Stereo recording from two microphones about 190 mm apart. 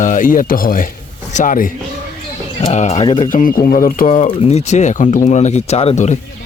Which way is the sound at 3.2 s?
45° left (ahead or behind).